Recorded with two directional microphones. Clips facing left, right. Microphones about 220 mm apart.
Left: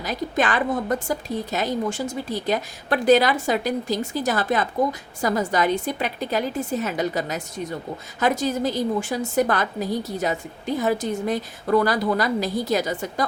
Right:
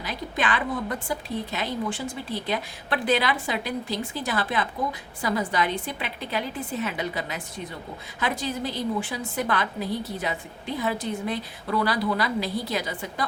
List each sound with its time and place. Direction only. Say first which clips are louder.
0.0 s a woman's voice: left 5 dB; 45° left (ahead or behind)